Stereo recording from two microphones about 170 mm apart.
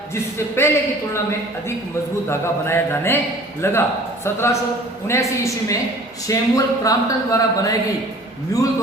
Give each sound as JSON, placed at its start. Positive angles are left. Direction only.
{"t": 0.1, "sound": "a man's voice", "side_deg": 15}
{"t": 2.3, "sound": "a man's voice", "side_deg": 15}